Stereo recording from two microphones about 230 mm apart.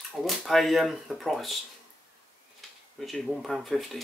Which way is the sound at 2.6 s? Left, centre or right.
Centre.